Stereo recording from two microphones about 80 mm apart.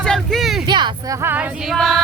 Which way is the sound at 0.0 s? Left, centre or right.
Centre.